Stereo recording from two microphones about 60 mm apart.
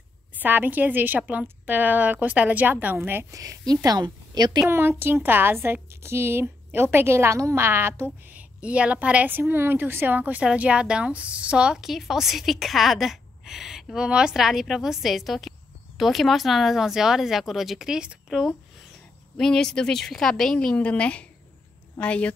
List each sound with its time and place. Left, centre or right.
0.3 s a woman's voice: right
3.3 s a woman's voice: right
4.6 s a woman's voice: right
7.6 s a woman's voice: right
8.4 s a woman's voice: right
9.3 s a woman's voice: right; by 18.5 s centre
19.3 s speech: centre
20.5 s a woman's voice: centre